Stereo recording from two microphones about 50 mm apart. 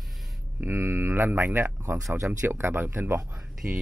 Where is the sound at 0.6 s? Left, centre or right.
Right.